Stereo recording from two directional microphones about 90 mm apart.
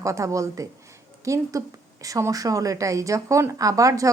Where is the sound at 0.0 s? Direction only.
35° right (ahead or behind).